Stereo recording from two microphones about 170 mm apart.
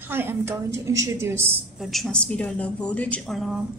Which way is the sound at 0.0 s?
10° right (ahead or behind).